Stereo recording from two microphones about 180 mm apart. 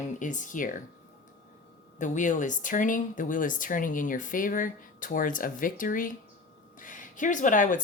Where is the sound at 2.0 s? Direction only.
45° left (ahead or behind).